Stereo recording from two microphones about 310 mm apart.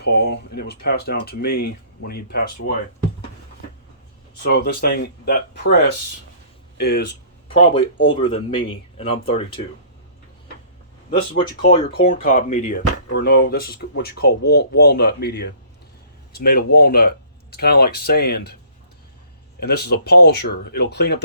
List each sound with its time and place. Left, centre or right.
0.0 s speech: left
4.4 s speech: left
7.5 s speech: centre
11.3 s speech: centre
19.5 s speech: left